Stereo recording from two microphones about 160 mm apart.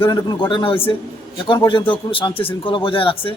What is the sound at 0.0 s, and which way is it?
A man's voice, 25° left (ahead or behind).